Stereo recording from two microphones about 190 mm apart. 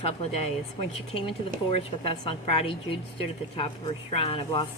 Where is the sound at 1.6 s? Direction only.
30° left (ahead or behind).